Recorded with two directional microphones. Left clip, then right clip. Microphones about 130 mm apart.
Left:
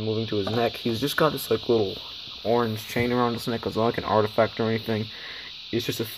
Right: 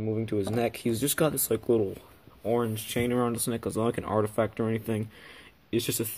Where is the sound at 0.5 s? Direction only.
45° right (ahead or behind).